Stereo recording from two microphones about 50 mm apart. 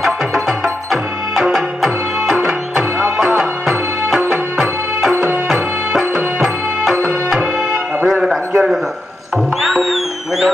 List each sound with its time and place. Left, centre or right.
0.0 s music: centre
5.1 s music: right
6.4 s music: centre
8.1 s a sound: centre
9.6 s music: centre